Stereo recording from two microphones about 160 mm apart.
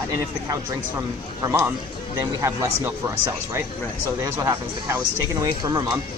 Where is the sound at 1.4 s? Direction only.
15° right (ahead or behind).